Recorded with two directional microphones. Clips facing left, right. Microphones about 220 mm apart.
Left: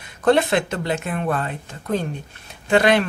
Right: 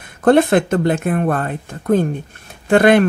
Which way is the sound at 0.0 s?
50° right (ahead or behind).